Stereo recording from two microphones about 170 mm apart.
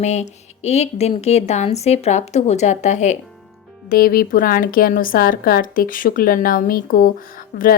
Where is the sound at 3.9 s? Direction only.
60° left (ahead or behind).